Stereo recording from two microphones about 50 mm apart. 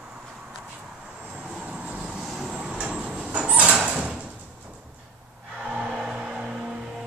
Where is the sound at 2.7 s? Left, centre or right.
Right.